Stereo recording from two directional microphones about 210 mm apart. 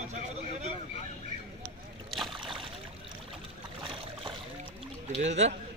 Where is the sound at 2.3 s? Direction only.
25° right (ahead or behind).